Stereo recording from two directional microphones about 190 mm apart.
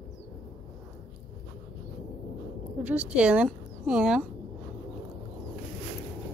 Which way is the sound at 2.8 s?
5° right (ahead or behind).